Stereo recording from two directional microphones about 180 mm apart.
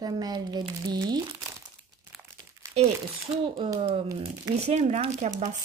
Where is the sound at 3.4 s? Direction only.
30° right (ahead or behind).